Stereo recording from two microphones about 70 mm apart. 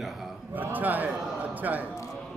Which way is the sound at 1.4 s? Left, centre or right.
Right.